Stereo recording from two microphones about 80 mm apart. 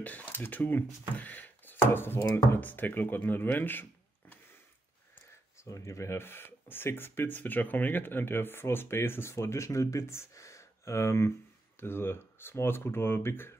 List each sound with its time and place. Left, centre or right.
0.0 s speech: centre
5.6 s speech: left